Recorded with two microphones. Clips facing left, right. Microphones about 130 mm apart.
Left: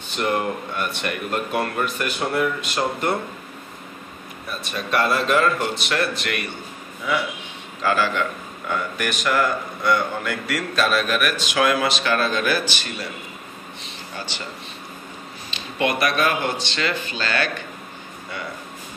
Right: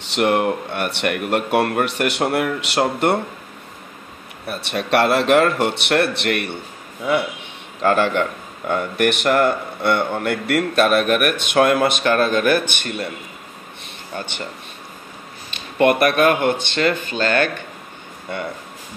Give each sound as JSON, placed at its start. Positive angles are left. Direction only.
{"t": 0.0, "sound": "speech", "side_deg": -75}
{"t": 4.5, "sound": "speech", "side_deg": -70}
{"t": 7.8, "sound": "a man's voice", "side_deg": -55}
{"t": 13.8, "sound": "a sound", "side_deg": -55}
{"t": 15.5, "sound": "speech", "side_deg": -55}